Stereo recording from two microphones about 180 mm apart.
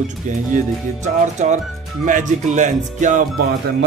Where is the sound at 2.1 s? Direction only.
45° right (ahead or behind).